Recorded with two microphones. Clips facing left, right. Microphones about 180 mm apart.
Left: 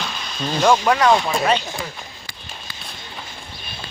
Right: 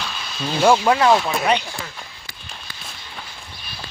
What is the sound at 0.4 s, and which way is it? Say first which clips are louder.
Speech: right 1 dB; 10° right (ahead or behind).